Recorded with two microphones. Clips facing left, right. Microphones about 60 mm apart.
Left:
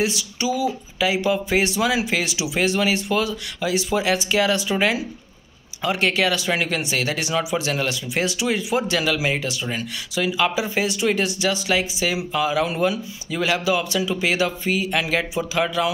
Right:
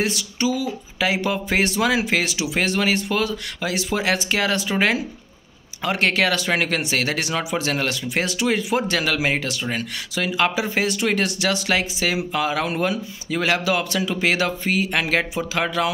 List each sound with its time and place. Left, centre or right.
0.0 s speech: right